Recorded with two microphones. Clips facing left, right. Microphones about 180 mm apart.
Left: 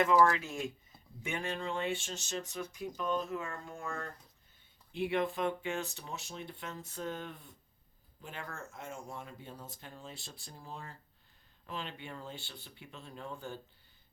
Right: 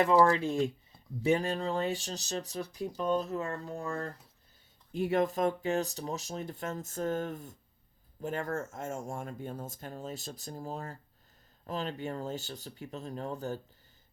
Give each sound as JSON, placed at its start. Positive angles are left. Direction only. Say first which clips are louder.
{"t": 0.0, "sound": "speech", "louder": "right 3 dB", "side_deg": -35}